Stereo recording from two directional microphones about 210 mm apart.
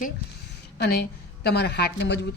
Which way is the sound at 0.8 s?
50° left (ahead or behind).